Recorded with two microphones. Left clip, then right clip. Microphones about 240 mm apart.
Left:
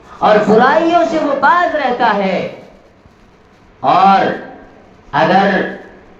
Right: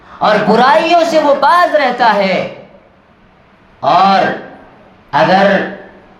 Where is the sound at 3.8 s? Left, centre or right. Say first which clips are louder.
Even; right.